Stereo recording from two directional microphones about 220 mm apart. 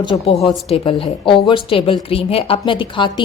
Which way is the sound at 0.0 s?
20° left (ahead or behind).